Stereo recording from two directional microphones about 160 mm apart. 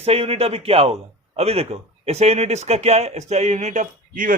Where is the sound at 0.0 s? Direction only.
40° right (ahead or behind).